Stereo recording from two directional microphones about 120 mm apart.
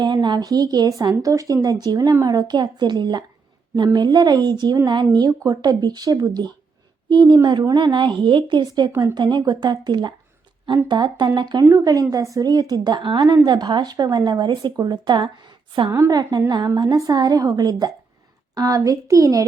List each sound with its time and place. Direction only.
0.0 s speech: 40° right (ahead or behind)
8.9 s a child's voice: 20° right (ahead or behind)
9.1 s speech: 40° right (ahead or behind)
11.6 s a child's voice: 25° right (ahead or behind); by 15.9 s 40° right (ahead or behind)
15.9 s a child's voice: 25° right (ahead or behind)